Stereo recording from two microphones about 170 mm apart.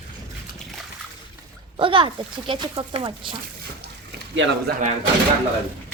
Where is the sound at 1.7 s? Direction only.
30° right (ahead or behind).